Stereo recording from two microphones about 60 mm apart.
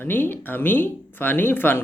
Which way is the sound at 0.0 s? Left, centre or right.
Left.